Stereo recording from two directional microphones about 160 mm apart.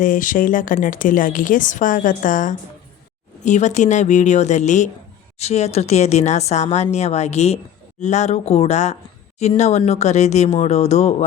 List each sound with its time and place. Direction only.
0.0 s a woman's voice: 55° left (ahead or behind)